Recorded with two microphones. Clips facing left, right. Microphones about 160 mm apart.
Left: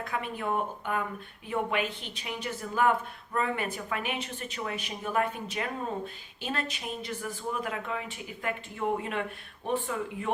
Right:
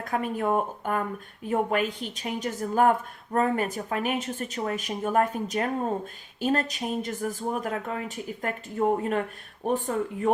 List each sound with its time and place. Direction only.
0.0 s speech: 45° right (ahead or behind)